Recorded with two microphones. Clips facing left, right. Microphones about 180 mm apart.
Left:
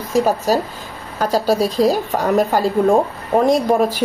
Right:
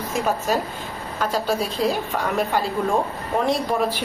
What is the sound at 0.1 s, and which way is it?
A woman's voice, 35° left (ahead or behind).